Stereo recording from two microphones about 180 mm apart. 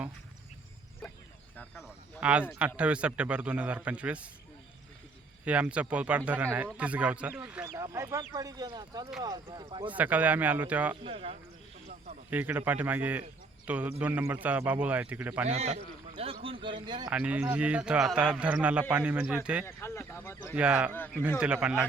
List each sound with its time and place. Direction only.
2.2 s a man's voice: 5° right (ahead or behind)
5.5 s speech: 5° right (ahead or behind); by 9.9 s 30° right (ahead or behind)
9.9 s speech: 10° right (ahead or behind)
11.0 s a man's voice: 35° right (ahead or behind)
12.3 s speech: 10° right (ahead or behind)
15.4 s a man's voice: 35° right (ahead or behind)
17.1 s speech: 5° right (ahead or behind)
19.6 s speech: 15° left (ahead or behind)
20.6 s a man's voice: 5° right (ahead or behind)
20.9 s speech: 10° left (ahead or behind)
21.3 s a man's voice: 5° right (ahead or behind)